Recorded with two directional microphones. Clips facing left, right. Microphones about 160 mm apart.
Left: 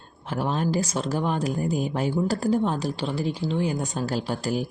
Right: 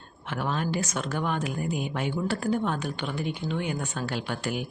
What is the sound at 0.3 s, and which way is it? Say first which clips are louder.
Speech: left 4 dB; 35° left (ahead or behind).